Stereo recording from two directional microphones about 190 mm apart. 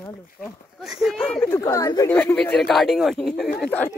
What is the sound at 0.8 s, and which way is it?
Speech, centre (ahead or behind).